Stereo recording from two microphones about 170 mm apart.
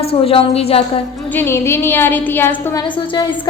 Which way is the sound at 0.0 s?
35° left (ahead or behind).